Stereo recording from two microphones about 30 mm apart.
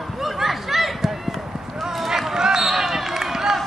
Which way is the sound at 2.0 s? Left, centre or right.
Centre.